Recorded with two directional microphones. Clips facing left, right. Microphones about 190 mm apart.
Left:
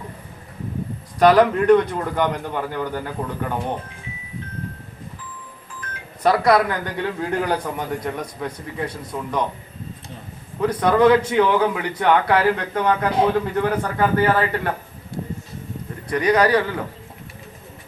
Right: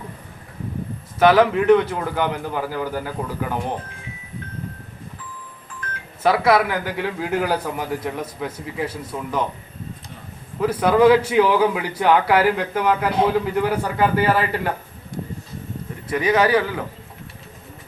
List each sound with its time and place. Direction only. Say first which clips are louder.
1.2 s a man's voice: left 1 dB; 5° right (ahead or behind)
6.2 s a man's voice: even; 5° right (ahead or behind)
10.6 s speech: right 1 dB; 5° right (ahead or behind)
16.0 s a man's voice: left 1 dB; 5° right (ahead or behind)